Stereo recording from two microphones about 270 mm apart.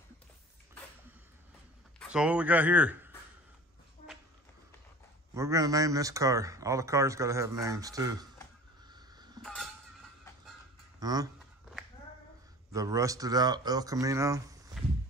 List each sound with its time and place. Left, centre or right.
2.0 s speech: centre
5.3 s speech: centre
8.8 s a sound: centre
9.4 s a sound: centre
11.0 s speech: centre
12.7 s speech: centre